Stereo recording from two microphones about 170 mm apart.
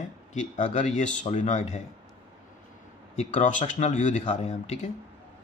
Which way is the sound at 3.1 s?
45° left (ahead or behind).